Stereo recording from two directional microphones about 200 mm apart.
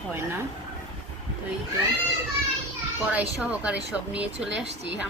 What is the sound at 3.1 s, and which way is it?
Speech, 5° right (ahead or behind).